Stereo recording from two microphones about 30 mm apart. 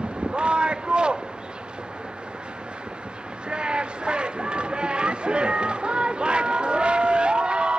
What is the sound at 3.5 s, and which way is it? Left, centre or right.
Run, right.